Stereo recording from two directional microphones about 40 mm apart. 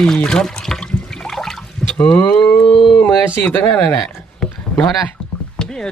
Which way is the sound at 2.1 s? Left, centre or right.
Left.